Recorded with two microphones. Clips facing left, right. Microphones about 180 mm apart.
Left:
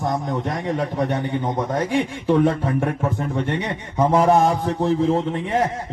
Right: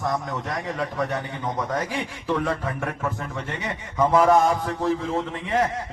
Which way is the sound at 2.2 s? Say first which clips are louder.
Left 6 dB; 30° left (ahead or behind).